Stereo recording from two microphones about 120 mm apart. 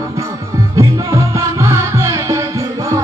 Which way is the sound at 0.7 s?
25° right (ahead or behind).